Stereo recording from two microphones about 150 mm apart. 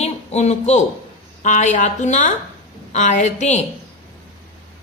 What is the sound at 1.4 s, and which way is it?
Speech, 55° left (ahead or behind).